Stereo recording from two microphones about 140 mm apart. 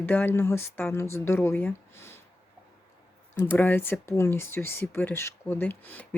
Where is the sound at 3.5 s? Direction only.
15° left (ahead or behind).